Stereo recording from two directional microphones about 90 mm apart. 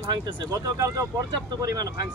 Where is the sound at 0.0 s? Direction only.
50° right (ahead or behind).